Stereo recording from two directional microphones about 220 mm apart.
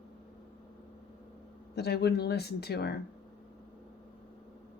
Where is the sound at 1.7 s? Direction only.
45° left (ahead or behind).